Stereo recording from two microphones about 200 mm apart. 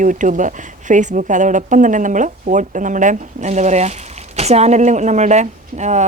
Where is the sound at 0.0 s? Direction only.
40° right (ahead or behind).